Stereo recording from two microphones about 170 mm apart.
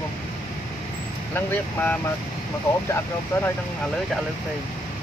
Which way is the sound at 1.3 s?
10° left (ahead or behind).